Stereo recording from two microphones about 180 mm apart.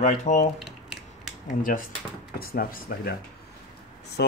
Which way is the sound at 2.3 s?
55° left (ahead or behind).